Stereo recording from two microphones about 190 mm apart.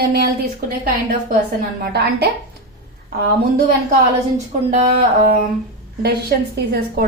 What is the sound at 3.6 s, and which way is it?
A woman's voice, 40° right (ahead or behind).